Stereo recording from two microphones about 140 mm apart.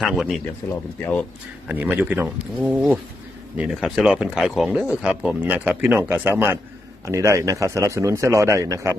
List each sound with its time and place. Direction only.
0.0 s speech: centre (ahead or behind)
0.7 s speech: 15° left (ahead or behind)
1.6 s speech: 10° right (ahead or behind)